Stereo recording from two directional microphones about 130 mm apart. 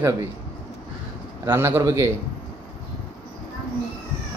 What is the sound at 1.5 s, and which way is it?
Speech, 15° right (ahead or behind).